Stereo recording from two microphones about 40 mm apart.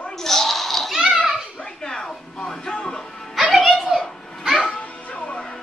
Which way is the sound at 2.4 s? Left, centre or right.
Left.